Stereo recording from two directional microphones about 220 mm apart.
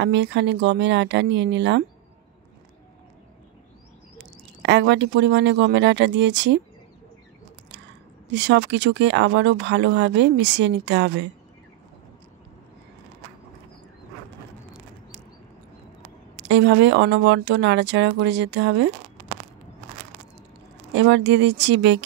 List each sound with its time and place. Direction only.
0.0 s speech: 55° right (ahead or behind)
4.6 s speech: 55° right (ahead or behind)
8.3 s speech: 55° right (ahead or behind)
16.3 s speech: 55° right (ahead or behind)
20.9 s speech: 55° right (ahead or behind)